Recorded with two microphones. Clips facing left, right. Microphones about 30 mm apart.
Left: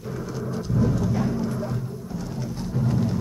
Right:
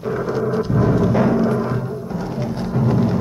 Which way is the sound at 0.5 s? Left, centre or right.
Right.